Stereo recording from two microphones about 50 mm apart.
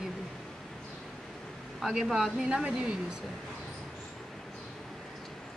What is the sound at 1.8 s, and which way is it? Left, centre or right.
Speech, centre.